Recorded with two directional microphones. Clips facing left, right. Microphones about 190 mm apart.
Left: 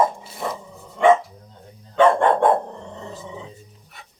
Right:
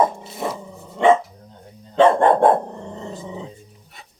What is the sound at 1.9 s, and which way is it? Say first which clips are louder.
Dog: right 2 dB; 30° right (ahead or behind).